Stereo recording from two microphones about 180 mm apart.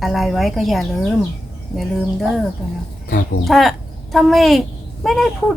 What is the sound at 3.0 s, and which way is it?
Speech, 55° left (ahead or behind).